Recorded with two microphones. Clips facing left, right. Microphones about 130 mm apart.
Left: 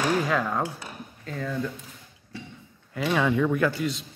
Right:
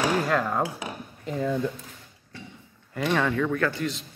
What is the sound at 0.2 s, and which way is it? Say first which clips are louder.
Speech: right 1 dB; centre (ahead or behind).